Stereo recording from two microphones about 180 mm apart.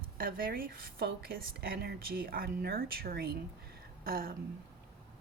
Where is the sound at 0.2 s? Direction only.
55° right (ahead or behind).